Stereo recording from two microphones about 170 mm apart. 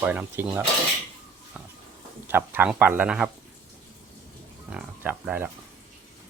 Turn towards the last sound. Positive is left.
turn(degrees=-10)  # may be behind; listen again after turning